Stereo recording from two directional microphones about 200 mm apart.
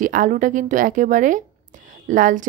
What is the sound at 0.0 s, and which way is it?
Speech, 40° right (ahead or behind).